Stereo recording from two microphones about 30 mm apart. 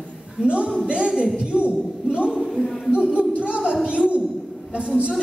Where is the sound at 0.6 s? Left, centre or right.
Right.